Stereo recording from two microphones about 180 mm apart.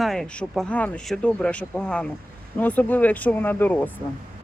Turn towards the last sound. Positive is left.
turn(degrees=10)  # may be behind; listen again after turning